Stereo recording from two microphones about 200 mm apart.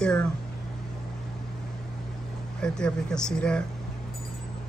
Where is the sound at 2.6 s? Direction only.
5° left (ahead or behind).